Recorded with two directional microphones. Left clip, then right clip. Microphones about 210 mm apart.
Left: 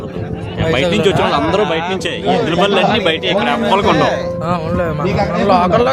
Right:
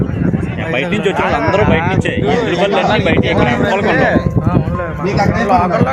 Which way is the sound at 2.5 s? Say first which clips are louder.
Left 1 dB; 15° left (ahead or behind).